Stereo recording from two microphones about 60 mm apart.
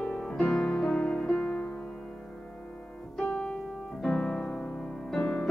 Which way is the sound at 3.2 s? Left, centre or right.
Centre.